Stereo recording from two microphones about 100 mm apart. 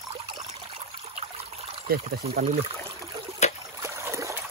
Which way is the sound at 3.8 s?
25° right (ahead or behind).